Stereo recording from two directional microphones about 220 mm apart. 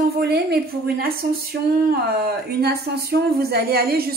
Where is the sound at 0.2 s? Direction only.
45° right (ahead or behind).